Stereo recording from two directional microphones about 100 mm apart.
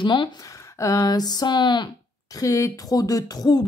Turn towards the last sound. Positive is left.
turn(degrees=45)  # may be behind; listen again after turning